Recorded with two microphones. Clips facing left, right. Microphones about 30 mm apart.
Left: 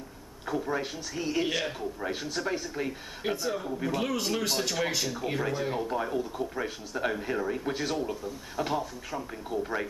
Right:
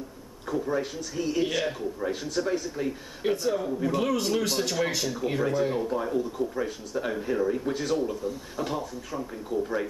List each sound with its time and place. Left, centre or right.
0.5 s speech: centre